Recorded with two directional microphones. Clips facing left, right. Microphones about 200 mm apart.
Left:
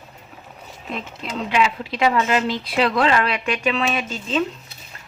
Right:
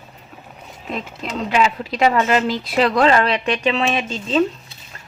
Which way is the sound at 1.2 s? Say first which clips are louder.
Right 2 dB; 40° right (ahead or behind).